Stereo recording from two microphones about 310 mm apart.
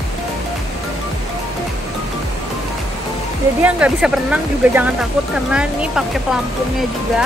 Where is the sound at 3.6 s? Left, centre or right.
Centre.